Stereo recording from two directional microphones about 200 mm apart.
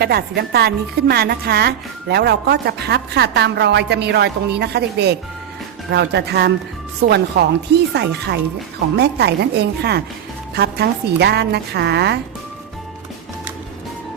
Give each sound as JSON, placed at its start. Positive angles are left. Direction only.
{"t": 0.0, "sound": "a woman's voice", "side_deg": -50}